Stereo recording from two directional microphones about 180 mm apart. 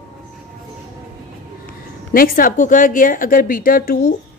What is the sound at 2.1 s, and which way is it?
A woman's voice, 55° left (ahead or behind).